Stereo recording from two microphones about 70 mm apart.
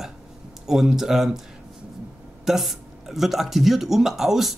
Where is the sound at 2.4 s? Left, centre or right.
Centre.